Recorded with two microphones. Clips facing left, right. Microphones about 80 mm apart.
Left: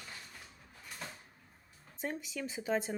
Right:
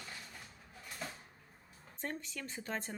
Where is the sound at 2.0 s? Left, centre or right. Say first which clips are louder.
Left 4 dB; centre.